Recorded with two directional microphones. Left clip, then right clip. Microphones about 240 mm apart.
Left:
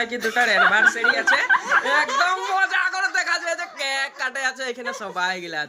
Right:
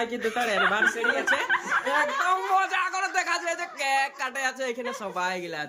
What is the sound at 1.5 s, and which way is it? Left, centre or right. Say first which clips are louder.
Speech: left 6 dB; left.